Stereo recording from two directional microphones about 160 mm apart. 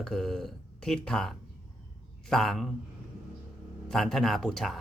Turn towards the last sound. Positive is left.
turn(degrees=5)  # may be behind; listen again after turning